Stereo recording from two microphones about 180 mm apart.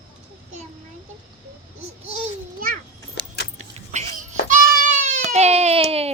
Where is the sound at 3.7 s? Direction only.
40° right (ahead or behind).